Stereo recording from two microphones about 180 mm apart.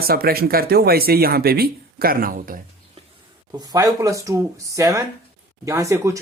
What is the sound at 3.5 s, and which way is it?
Speech, 20° right (ahead or behind).